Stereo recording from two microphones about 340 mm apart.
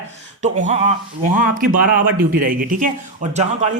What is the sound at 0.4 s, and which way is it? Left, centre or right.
Speech, right.